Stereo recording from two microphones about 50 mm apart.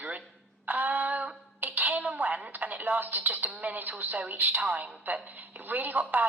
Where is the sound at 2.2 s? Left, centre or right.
Right.